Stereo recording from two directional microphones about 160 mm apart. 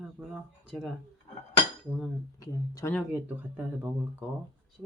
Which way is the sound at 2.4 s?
20° left (ahead or behind).